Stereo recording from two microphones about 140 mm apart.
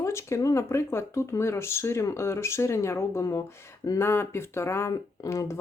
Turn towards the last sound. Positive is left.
turn(degrees=20)  # may be behind; listen again after turning